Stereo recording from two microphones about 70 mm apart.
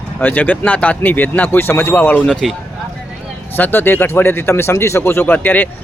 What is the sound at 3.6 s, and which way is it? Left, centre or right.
Speech, left.